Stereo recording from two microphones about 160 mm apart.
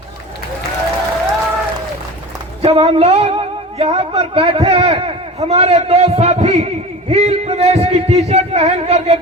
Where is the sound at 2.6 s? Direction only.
40° right (ahead or behind).